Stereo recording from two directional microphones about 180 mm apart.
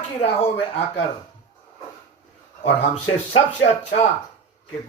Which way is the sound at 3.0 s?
35° left (ahead or behind).